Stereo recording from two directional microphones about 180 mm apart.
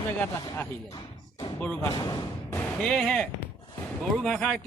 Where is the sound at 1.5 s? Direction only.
10° left (ahead or behind).